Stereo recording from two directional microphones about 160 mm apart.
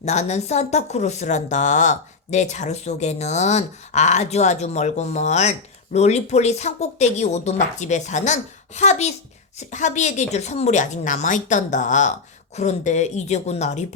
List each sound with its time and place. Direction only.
0.0 s speech: 45° left (ahead or behind)